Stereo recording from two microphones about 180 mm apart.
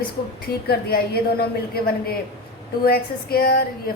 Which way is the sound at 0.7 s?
60° left (ahead or behind).